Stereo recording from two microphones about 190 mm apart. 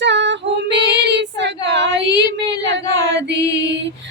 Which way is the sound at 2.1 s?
20° left (ahead or behind).